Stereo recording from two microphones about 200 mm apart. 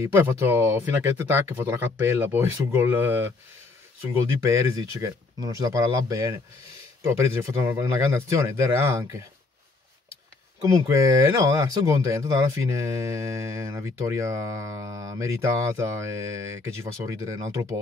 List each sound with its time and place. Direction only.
0.0 s speech: 10° right (ahead or behind)
4.5 s speech: 15° right (ahead or behind)
10.6 s speech: 15° right (ahead or behind)